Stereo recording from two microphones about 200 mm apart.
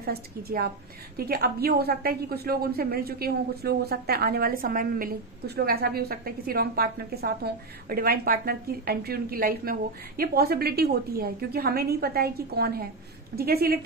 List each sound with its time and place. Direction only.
0.0 s a woman's voice: 50° right (ahead or behind)